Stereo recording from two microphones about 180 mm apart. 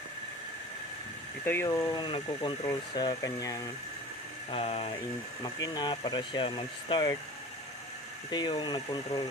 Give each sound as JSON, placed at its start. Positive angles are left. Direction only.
{"t": 1.4, "sound": "speech", "side_deg": 10}
{"t": 4.5, "sound": "speech", "side_deg": 35}
{"t": 5.4, "sound": "speech", "side_deg": 20}
{"t": 8.3, "sound": "speech", "side_deg": 25}